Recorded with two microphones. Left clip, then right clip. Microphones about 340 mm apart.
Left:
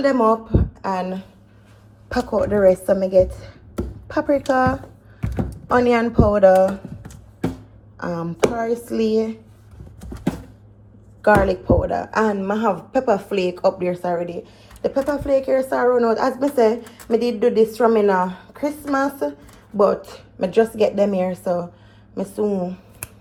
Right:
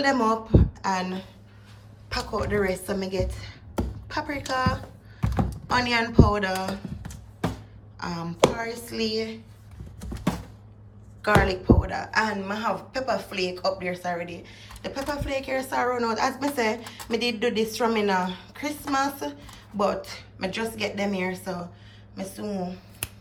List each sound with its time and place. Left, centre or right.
0.0 s a woman's voice: centre
2.4 s a woman's voice: centre
5.2 s a sound: centre
5.7 s speech: centre
11.4 s a woman's voice: centre